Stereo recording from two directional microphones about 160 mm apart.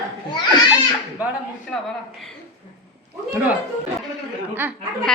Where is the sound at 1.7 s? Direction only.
5° left (ahead or behind).